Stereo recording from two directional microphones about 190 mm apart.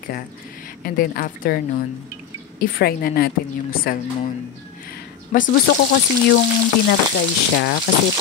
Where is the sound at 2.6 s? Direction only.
55° left (ahead or behind).